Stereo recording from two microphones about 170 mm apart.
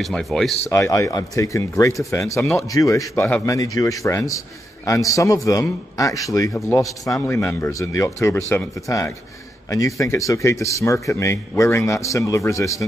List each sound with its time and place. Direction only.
0.0 s speech: centre (ahead or behind)
0.7 s a man's voice: 15° left (ahead or behind)